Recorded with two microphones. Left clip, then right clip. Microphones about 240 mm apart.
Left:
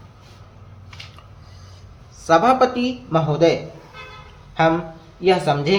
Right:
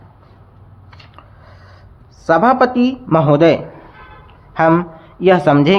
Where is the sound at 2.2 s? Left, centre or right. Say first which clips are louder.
Right 3 dB; right.